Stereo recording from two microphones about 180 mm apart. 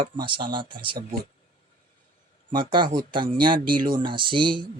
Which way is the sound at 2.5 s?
25° right (ahead or behind).